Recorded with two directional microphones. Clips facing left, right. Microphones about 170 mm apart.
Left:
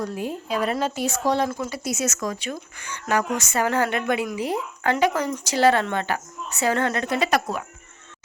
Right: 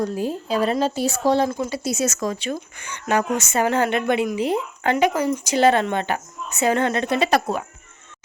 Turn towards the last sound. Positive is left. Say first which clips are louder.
# right 3 dB
turn(degrees=-30)  # may be behind; listen again after turning